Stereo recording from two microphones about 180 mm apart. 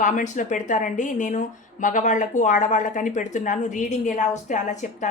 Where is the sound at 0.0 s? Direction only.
45° left (ahead or behind).